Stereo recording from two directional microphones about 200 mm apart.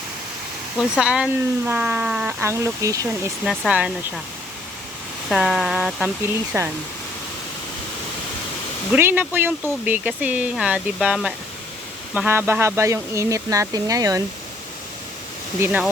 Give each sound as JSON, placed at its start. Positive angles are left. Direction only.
{"t": 0.8, "sound": "speech", "side_deg": -5}
{"t": 3.4, "sound": "speech", "side_deg": 0}
{"t": 5.3, "sound": "speech", "side_deg": 0}
{"t": 8.9, "sound": "speech", "side_deg": -10}
{"t": 15.6, "sound": "speech", "side_deg": -10}